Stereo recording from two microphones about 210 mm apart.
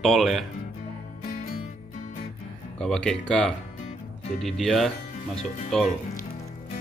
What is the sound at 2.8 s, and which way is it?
Speech, 5° left (ahead or behind).